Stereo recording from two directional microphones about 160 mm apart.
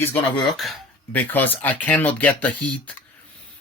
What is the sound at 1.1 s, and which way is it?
Speech, 10° left (ahead or behind).